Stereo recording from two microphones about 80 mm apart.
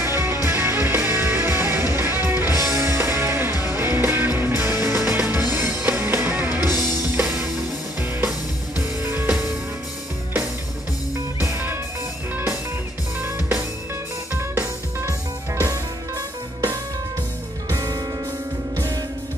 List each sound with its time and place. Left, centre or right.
0.0 s music: right
7.2 s music: centre
9.0 s music: right
11.5 s music: right
13.2 s music: right
15.7 s music: right